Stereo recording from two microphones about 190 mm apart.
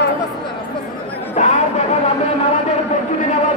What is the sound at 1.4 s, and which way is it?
Music, 40° left (ahead or behind).